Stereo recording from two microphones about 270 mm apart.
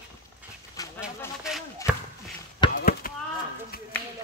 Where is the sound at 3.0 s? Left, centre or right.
Left.